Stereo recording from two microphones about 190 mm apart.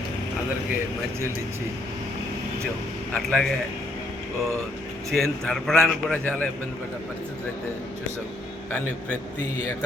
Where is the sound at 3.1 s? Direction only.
5° left (ahead or behind).